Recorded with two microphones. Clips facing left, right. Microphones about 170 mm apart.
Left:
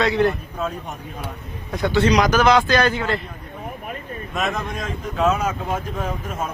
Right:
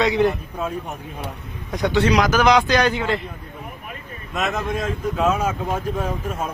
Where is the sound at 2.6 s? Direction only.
15° right (ahead or behind).